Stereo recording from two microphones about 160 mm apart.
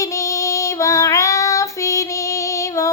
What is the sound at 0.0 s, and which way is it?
Child singing, 20° left (ahead or behind).